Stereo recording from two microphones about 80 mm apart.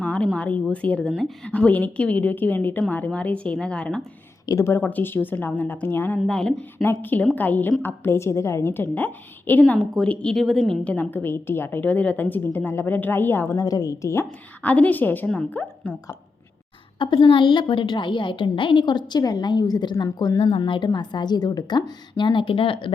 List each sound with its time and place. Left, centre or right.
0.0 s a sound: centre
0.3 s a woman's voice: centre
4.5 s a woman's voice: left
4.8 s a woman's voice: left
6.2 s speech: centre
6.8 s a woman's voice: left
10.3 s a woman's voice: centre
10.8 s a woman's voice: centre
13.6 s a woman's voice: left
14.6 s a woman's voice: centre
15.3 s speech: centre
17.0 s a woman's voice: left